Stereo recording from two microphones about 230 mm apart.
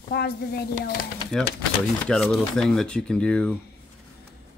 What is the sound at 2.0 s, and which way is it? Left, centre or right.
Speech, centre.